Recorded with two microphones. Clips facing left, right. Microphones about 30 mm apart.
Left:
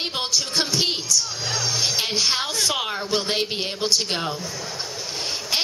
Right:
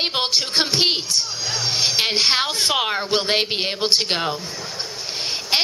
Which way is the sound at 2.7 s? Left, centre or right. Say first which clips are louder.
Right 4 dB; right.